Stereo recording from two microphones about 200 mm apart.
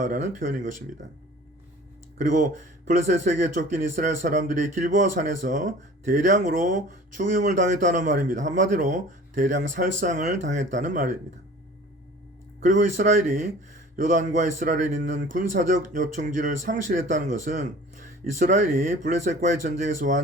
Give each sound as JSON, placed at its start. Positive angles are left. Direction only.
{"t": 0.0, "sound": "speech", "side_deg": -40}
{"t": 2.1, "sound": "speech", "side_deg": -40}
{"t": 12.6, "sound": "speech", "side_deg": -40}